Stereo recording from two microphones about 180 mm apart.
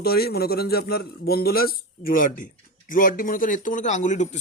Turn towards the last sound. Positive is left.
turn(degrees=40)  # may be behind; listen again after turning